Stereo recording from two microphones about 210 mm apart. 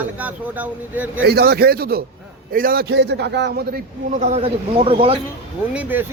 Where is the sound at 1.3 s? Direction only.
50° right (ahead or behind); by 5.2 s 25° right (ahead or behind).